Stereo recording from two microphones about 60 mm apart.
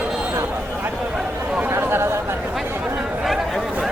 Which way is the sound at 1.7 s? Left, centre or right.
Right.